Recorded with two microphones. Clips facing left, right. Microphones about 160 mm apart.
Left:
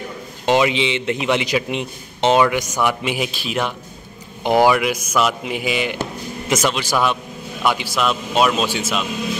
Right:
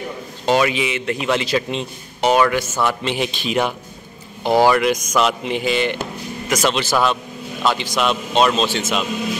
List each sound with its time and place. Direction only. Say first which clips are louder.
0.5 s a man's voice: left 1 dB; 20° left (ahead or behind); by 3.7 s centre (ahead or behind)
4.4 s a man's voice: even; 15° left (ahead or behind)